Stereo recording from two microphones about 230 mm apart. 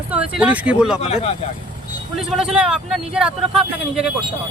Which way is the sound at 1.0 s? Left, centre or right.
Left.